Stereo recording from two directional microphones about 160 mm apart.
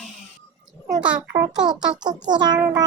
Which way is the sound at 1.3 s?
25° right (ahead or behind).